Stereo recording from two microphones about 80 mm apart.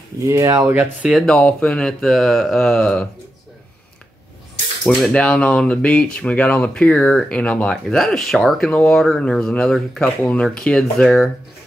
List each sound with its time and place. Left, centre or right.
0.2 s speech: right
1.2 s speech: centre
5.1 s speech: centre
7.8 s speech: centre